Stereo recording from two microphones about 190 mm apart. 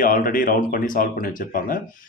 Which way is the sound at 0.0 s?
45° left (ahead or behind).